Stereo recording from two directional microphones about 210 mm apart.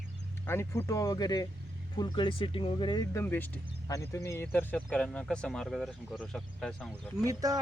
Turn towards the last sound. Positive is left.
turn(degrees=-15)  # may be behind; listen again after turning